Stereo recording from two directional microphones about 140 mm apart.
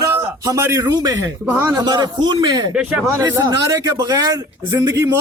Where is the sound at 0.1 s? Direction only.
20° right (ahead or behind).